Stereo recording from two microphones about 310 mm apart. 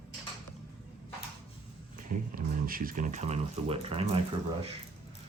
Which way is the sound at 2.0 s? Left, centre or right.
Right.